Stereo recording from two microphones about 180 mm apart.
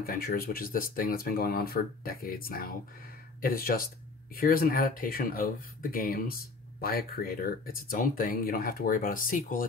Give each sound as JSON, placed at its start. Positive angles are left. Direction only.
{"t": 0.0, "sound": "speech", "side_deg": 55}